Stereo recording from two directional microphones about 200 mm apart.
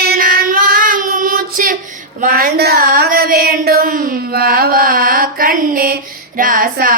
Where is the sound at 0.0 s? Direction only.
50° right (ahead or behind).